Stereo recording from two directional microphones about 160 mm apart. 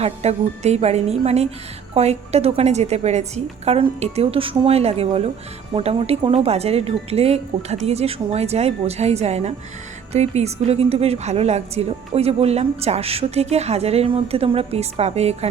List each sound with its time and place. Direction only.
0.0 s a woman's voice: 40° right (ahead or behind)